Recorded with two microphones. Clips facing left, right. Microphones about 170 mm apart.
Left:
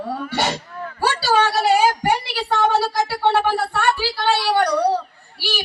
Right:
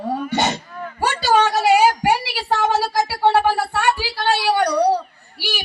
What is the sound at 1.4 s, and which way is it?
A woman's voice, 10° right (ahead or behind).